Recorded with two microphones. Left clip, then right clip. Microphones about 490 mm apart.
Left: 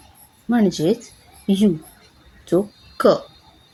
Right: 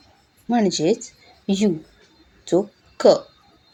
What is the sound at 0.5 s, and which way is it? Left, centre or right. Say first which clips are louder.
Speech: even; left.